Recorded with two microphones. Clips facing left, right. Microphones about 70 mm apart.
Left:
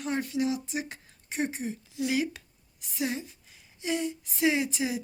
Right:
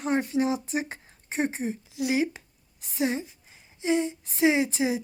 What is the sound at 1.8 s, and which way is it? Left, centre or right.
A woman's voice, centre.